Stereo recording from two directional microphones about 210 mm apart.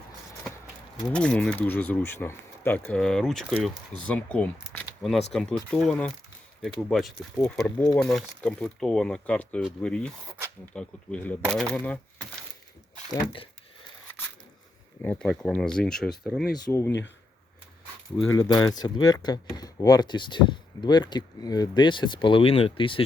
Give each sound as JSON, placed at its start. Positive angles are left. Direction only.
{"t": 1.1, "sound": "speech", "side_deg": 5}
{"t": 4.7, "sound": "a sound", "side_deg": 5}
{"t": 5.3, "sound": "speech", "side_deg": 0}
{"t": 13.1, "sound": "speech", "side_deg": 25}
{"t": 15.0, "sound": "speech", "side_deg": 5}
{"t": 16.6, "sound": "speech", "side_deg": 15}
{"t": 18.3, "sound": "speech", "side_deg": 20}